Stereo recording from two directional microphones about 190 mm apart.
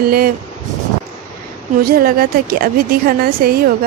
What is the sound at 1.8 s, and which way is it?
A woman's voice, 50° right (ahead or behind).